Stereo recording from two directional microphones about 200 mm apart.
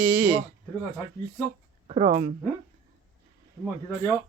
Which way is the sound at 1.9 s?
35° right (ahead or behind).